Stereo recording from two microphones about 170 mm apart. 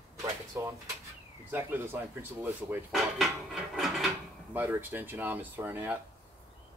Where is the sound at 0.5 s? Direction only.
15° right (ahead or behind).